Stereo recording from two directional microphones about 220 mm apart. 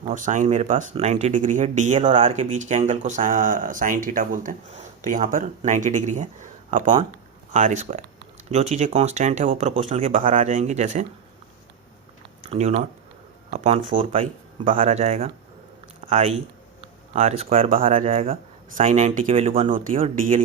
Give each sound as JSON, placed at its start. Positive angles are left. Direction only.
{"t": 0.1, "sound": "speech", "side_deg": -35}
{"t": 12.4, "sound": "speech", "side_deg": -30}